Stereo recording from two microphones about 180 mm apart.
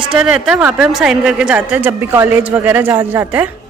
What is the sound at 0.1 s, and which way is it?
A woman's voice, 5° right (ahead or behind).